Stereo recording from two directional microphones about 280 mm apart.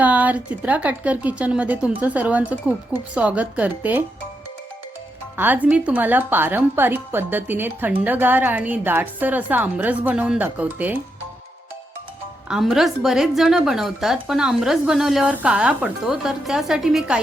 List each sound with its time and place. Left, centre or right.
0.0 s a woman's voice: centre
5.4 s speech: centre
12.5 s a woman's voice: centre